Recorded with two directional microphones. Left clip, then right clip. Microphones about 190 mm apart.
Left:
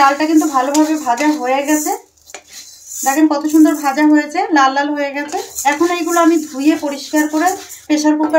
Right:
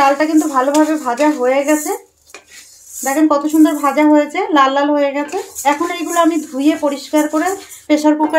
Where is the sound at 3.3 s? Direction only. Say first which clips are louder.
Even; 25° right (ahead or behind).